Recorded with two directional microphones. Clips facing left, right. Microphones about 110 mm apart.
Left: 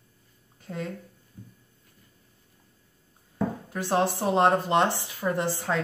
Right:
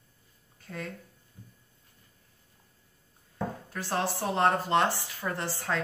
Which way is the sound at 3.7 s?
20° left (ahead or behind).